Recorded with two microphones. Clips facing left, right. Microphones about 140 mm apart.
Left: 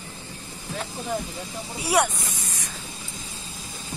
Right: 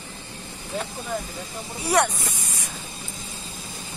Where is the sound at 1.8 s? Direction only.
10° left (ahead or behind).